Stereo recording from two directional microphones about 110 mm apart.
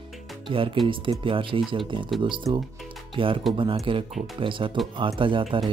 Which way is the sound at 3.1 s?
55° right (ahead or behind).